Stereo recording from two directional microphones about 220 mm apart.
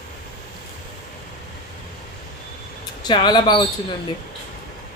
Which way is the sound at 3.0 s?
20° left (ahead or behind).